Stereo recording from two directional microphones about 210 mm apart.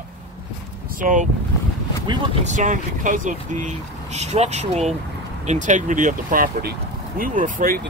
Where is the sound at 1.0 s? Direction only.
35° right (ahead or behind).